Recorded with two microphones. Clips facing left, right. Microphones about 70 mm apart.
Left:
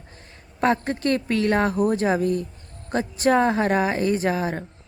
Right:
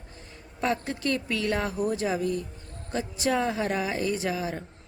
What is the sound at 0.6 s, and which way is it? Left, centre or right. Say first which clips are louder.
A woman's voice: left 6 dB; left.